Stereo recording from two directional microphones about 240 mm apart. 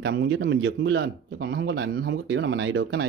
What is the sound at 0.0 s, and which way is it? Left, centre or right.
Speech, right.